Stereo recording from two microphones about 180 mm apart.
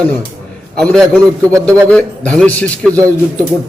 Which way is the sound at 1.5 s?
15° right (ahead or behind).